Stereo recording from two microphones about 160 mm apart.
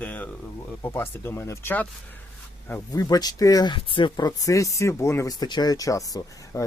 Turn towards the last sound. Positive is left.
turn(degrees=20)  # may be behind; listen again after turning